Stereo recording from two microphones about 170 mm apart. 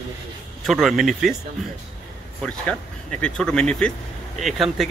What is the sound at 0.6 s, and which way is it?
Speech, centre (ahead or behind).